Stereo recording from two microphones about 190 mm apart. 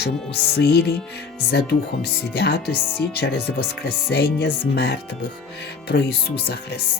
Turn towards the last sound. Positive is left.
turn(degrees=60)  # may be behind; listen again after turning